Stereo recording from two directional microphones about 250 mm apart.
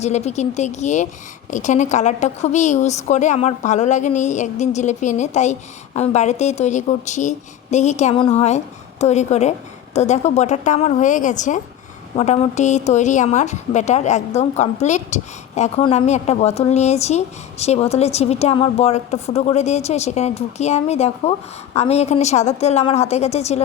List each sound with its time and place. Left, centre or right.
0.0 s a woman's voice: left